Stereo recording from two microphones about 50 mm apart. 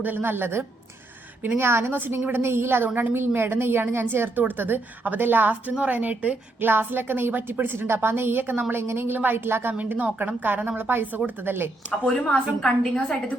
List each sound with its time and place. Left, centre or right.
0.2 s a woman's voice: right
6.6 s a woman's voice: right
8.7 s a woman's voice: right
9.1 s a woman's voice: right
10.0 s a woman's voice: right
11.9 s a woman's voice: left